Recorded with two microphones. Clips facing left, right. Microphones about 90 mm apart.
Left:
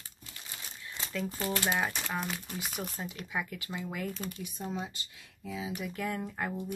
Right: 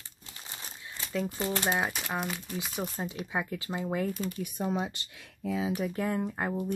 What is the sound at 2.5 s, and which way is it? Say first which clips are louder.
Speech: right 4 dB; 25° right (ahead or behind).